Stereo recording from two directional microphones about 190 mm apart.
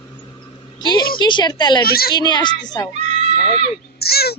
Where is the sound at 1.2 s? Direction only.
25° left (ahead or behind).